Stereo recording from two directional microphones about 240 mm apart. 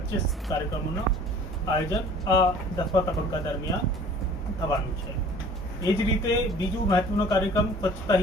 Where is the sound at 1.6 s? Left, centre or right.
Centre.